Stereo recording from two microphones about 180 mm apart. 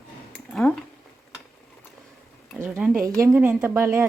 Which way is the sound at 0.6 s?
5° left (ahead or behind).